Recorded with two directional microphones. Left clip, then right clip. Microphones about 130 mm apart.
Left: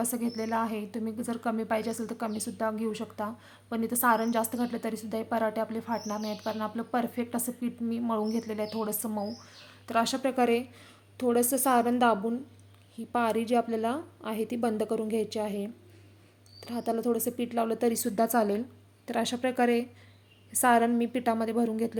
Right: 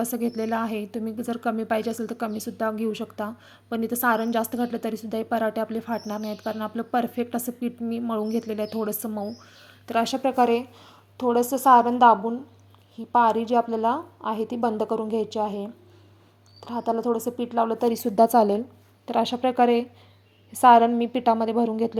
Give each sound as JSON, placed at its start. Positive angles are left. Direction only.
{"t": 0.0, "sound": "a woman's voice", "side_deg": -20}
{"t": 10.2, "sound": "a woman's voice", "side_deg": -5}
{"t": 19.0, "sound": "a woman's voice", "side_deg": 0}